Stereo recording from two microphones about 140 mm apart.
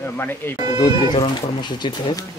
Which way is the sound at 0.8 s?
30° left (ahead or behind).